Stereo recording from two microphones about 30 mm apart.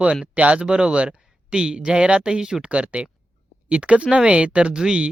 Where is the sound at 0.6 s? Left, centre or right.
Right.